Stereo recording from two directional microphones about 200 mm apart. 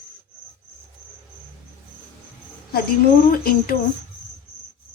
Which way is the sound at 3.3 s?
45° left (ahead or behind).